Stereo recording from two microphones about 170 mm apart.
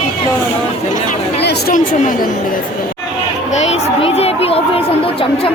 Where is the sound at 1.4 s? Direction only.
75° left (ahead or behind).